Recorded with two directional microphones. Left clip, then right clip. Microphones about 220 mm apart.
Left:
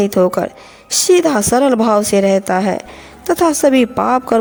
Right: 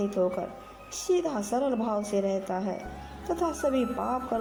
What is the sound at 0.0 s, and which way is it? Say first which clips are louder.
A woman's voice: left 14 dB; 45° left (ahead or behind).